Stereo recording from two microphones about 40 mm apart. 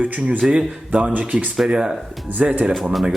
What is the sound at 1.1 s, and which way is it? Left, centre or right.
Speech, right.